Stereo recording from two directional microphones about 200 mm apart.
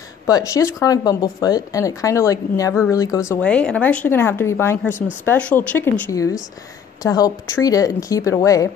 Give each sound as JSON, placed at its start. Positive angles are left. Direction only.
{"t": 0.3, "sound": "speech", "side_deg": 15}
{"t": 3.3, "sound": "speech", "side_deg": 5}